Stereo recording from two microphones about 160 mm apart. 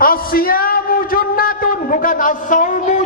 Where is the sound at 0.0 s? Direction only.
65° left (ahead or behind).